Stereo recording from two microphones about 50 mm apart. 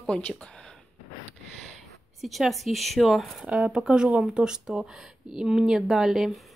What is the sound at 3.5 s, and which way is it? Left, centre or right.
A woman's voice, centre.